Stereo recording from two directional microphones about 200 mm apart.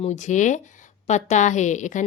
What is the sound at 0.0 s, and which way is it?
A woman's voice, 35° left (ahead or behind).